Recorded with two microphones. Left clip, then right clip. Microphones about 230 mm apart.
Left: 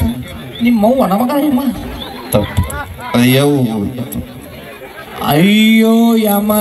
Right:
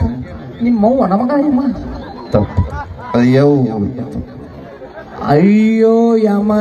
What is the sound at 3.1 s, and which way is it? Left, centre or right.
Speech, left.